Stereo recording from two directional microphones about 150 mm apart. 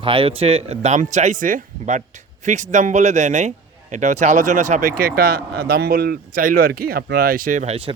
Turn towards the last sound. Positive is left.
turn(degrees=-40)  # may be behind; listen again after turning